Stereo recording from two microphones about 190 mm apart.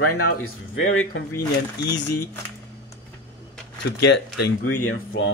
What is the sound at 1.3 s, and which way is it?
Speech, 15° left (ahead or behind).